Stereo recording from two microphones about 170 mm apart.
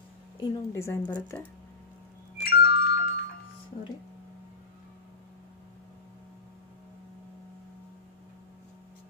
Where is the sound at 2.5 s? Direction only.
70° left (ahead or behind).